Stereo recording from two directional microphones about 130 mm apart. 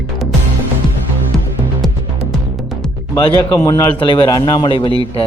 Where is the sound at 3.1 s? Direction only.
30° left (ahead or behind).